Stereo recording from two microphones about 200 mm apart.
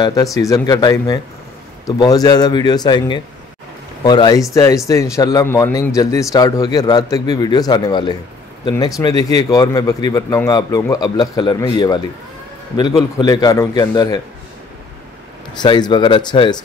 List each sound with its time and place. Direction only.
0.0 s a man's voice: 15° left (ahead or behind)
13.2 s a man's voice: 20° left (ahead or behind)
15.5 s a man's voice: 20° left (ahead or behind)